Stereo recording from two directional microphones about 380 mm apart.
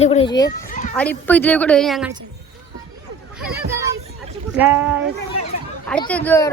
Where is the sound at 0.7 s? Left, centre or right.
Centre.